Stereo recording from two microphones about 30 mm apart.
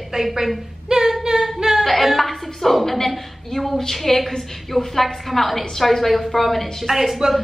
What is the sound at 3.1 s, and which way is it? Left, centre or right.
A woman's voice, centre.